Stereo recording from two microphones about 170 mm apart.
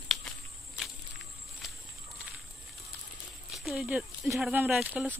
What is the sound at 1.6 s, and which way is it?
Walk, centre (ahead or behind).